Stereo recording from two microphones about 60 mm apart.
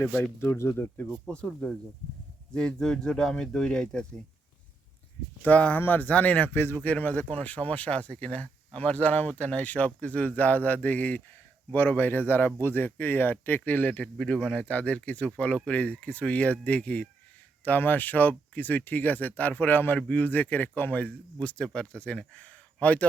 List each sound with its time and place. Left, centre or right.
0.4 s speech: left
1.3 s speech: centre
5.4 s speech: left
6.5 s speech: left
6.8 s speech: left